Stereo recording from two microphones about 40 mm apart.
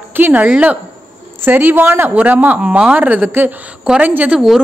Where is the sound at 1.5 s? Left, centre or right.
Right.